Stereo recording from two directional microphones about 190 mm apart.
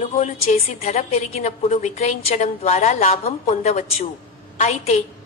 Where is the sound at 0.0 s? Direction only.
35° left (ahead or behind).